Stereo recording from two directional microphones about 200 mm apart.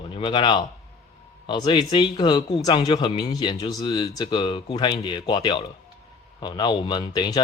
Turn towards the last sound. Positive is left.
turn(degrees=20)  # may be behind; listen again after turning